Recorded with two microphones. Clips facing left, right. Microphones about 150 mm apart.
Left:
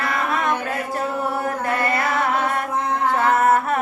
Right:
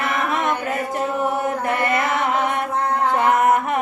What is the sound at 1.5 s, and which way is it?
Chant, 20° right (ahead or behind).